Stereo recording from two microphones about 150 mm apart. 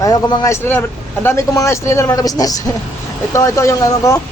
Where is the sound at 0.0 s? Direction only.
30° left (ahead or behind).